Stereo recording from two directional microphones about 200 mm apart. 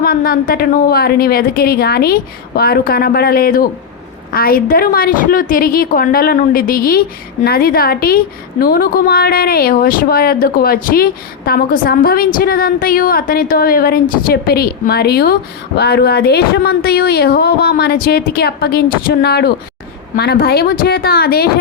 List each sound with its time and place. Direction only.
0.0 s a woman's voice: 50° left (ahead or behind)